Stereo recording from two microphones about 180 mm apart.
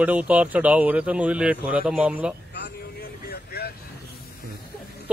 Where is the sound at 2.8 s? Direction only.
60° left (ahead or behind).